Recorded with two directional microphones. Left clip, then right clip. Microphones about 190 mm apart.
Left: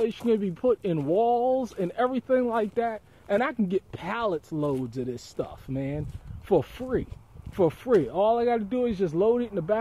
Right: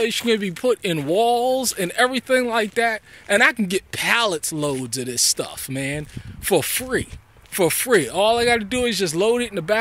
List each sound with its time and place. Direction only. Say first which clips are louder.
0.0 s speech: right 5 dB; 15° right (ahead or behind)